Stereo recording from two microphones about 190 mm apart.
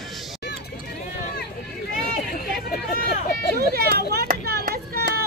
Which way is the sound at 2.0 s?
50° left (ahead or behind).